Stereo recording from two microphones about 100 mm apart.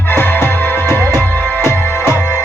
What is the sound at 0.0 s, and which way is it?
Music, 20° left (ahead or behind).